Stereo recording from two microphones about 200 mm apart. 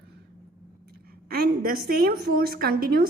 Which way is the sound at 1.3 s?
50° right (ahead or behind).